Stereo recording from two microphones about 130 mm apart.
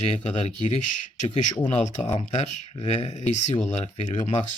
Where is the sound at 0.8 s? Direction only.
70° left (ahead or behind).